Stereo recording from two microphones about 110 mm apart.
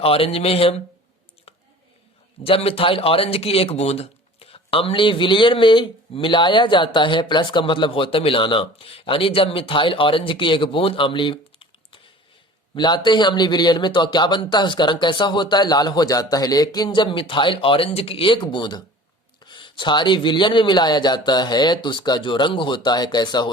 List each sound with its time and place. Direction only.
0.0 s a man's voice: 60° left (ahead or behind)
2.4 s speech: 60° left (ahead or behind); by 23.5 s 40° left (ahead or behind)